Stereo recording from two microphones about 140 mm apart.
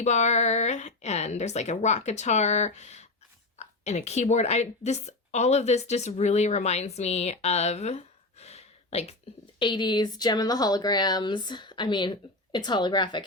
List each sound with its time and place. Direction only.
0.0 s a woman's voice: 55° left (ahead or behind)
9.6 s speech: 35° left (ahead or behind)